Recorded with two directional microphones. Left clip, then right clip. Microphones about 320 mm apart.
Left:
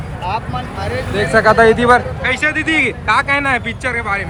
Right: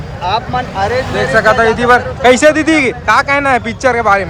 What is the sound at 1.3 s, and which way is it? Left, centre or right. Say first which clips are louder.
A man's voice: even; centre.